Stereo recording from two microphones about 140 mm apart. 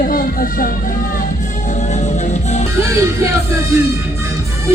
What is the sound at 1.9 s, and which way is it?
Music, 55° left (ahead or behind).